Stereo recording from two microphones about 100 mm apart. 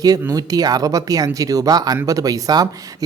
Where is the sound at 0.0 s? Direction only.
40° right (ahead or behind).